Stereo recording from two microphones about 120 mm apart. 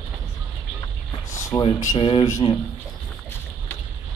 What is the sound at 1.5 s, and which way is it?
Speech, 50° left (ahead or behind).